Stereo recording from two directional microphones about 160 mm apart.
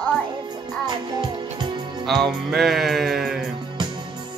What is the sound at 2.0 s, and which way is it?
Music, centre (ahead or behind).